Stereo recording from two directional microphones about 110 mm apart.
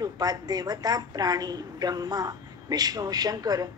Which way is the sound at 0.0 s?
35° right (ahead or behind).